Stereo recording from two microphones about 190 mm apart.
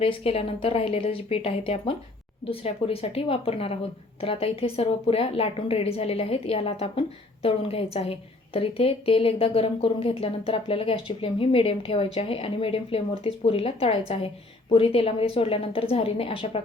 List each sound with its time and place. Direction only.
0.0 s a woman's voice: 30° left (ahead or behind)